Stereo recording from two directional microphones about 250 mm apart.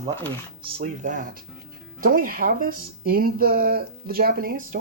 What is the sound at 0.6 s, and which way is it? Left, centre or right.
Speech, right.